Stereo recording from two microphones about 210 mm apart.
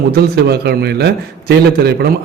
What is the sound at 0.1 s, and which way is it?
A man's voice, 50° right (ahead or behind).